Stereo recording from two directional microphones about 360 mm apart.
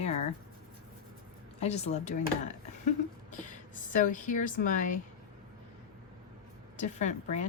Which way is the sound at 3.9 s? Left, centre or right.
Left.